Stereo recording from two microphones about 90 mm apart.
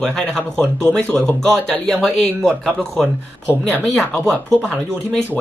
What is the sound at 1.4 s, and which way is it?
Speech, 5° left (ahead or behind).